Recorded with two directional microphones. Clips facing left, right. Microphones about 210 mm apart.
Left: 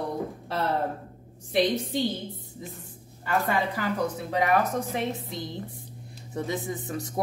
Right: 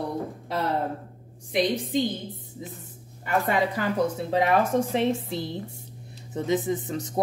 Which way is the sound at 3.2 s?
20° right (ahead or behind).